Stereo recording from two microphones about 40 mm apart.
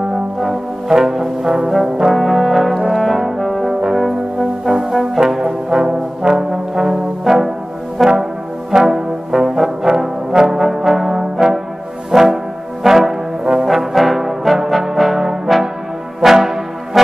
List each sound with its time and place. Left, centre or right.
0.4 s brass instrument: centre
2.1 s brass instrument: centre
4.6 s brass instrument: centre
8.0 s music: centre
8.7 s brass instrument: centre
12.1 s music: centre
12.8 s brass instrument: centre